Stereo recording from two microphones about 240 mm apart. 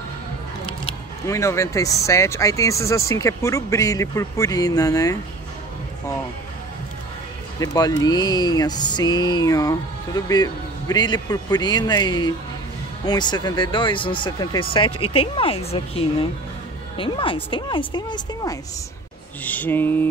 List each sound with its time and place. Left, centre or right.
0.8 s speech: centre
7.6 s speech: centre